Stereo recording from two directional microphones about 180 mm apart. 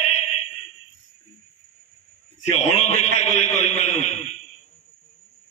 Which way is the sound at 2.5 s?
40° left (ahead or behind).